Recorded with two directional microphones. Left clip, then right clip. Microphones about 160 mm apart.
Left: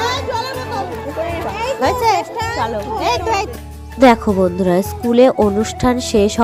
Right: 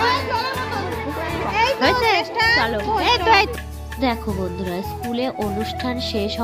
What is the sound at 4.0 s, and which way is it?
Speech, 55° left (ahead or behind).